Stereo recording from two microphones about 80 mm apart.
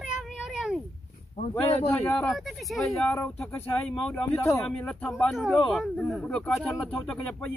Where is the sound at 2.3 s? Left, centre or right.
Centre.